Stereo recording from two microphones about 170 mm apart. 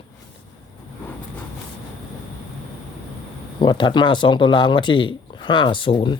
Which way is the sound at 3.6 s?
30° left (ahead or behind).